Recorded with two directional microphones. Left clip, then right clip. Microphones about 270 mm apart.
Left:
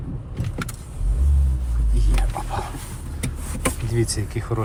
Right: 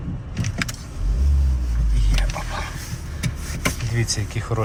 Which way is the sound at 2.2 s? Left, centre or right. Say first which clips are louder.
Even; centre.